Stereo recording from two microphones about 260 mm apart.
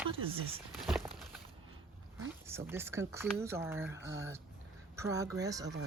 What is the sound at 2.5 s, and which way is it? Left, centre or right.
Speech, centre.